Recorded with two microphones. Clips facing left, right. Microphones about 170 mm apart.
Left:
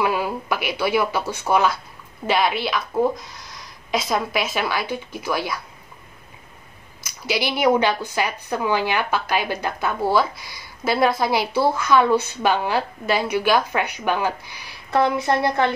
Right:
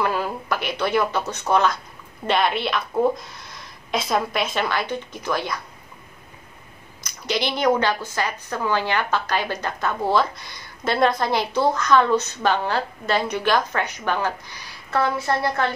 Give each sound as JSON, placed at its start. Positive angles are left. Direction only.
{"t": 0.0, "sound": "a woman's voice", "side_deg": 10}
{"t": 7.0, "sound": "a woman's voice", "side_deg": 5}